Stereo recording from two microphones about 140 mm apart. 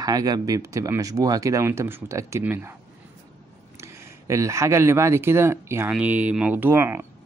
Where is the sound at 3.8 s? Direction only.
20° right (ahead or behind).